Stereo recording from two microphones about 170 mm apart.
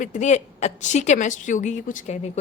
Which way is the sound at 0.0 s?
45° left (ahead or behind).